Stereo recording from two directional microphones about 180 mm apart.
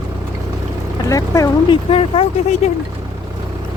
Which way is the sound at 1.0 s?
15° left (ahead or behind).